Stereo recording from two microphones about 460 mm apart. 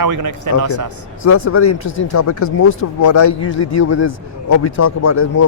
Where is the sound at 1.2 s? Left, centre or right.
Left.